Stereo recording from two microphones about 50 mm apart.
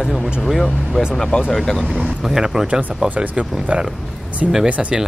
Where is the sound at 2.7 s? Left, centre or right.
Right.